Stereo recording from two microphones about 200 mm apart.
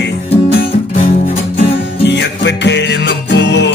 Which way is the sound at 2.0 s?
60° left (ahead or behind).